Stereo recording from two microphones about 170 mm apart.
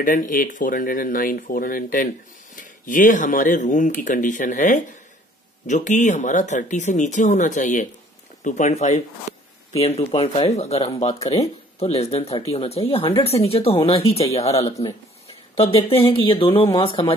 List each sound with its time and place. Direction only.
0.0 s speech: 55° left (ahead or behind); by 17.1 s 30° left (ahead or behind)